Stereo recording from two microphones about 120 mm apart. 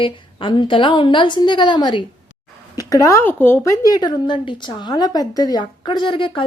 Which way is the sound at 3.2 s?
15° left (ahead or behind).